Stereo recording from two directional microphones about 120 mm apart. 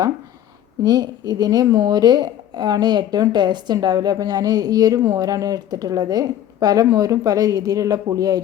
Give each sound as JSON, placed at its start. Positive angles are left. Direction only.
{"t": 0.9, "sound": "speech", "side_deg": -35}